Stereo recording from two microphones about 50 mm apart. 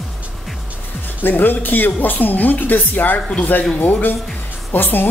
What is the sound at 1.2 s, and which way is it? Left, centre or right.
A woman's voice, left.